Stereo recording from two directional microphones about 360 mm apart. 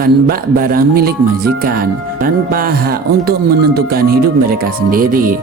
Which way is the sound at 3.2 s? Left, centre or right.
Right.